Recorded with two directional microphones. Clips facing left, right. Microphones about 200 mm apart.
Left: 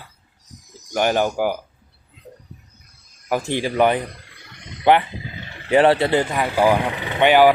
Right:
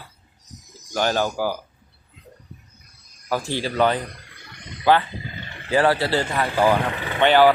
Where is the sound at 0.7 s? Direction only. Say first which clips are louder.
Left 3 dB; 15° left (ahead or behind).